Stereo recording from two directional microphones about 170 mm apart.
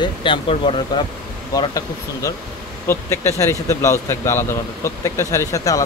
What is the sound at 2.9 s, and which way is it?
Speech, 15° left (ahead or behind).